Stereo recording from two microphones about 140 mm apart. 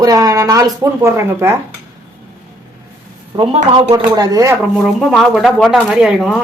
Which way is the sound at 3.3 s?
45° right (ahead or behind).